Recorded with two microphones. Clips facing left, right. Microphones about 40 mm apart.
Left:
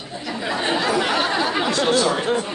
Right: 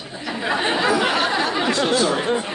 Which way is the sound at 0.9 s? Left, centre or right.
Centre.